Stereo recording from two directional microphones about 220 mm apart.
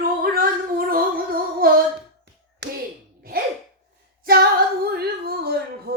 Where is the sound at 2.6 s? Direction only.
50° right (ahead or behind).